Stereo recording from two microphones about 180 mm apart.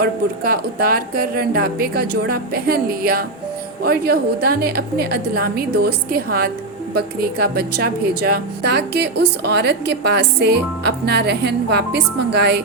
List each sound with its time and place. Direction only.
0.0 s a woman's voice: 60° right (ahead or behind)